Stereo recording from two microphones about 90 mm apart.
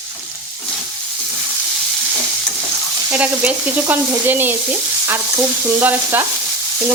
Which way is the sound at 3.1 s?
15° right (ahead or behind).